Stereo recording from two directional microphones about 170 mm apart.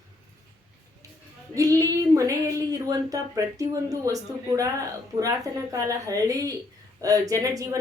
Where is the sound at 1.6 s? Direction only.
20° right (ahead or behind).